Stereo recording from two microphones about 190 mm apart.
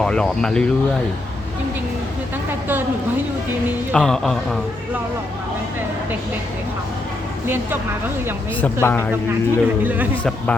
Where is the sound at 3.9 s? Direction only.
5° left (ahead or behind).